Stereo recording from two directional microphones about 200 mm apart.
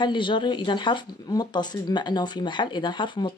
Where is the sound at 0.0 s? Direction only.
25° left (ahead or behind).